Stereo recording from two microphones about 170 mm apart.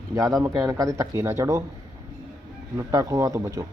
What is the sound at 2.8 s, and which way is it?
Speech, 20° right (ahead or behind).